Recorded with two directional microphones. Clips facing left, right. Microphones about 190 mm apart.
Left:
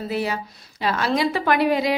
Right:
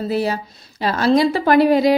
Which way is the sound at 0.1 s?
35° right (ahead or behind).